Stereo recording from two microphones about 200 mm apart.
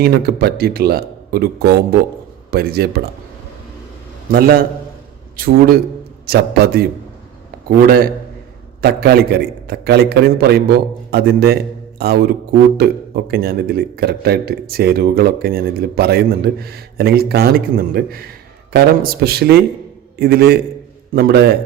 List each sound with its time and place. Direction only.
0.0 s speech: 50° right (ahead or behind)
4.3 s speech: 50° right (ahead or behind)
7.9 s speech: 45° right (ahead or behind)